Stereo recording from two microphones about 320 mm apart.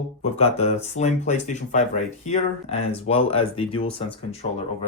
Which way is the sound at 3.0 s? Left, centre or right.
Centre.